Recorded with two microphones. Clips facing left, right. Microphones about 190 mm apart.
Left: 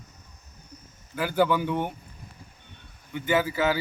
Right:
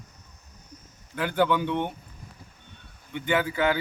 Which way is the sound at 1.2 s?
5° left (ahead or behind).